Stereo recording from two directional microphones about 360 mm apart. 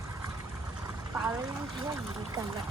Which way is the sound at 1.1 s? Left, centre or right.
Centre.